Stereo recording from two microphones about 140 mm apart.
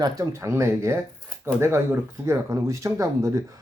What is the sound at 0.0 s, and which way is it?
Speech, 25° right (ahead or behind).